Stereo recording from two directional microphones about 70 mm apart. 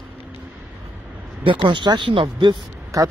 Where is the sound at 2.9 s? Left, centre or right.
Right.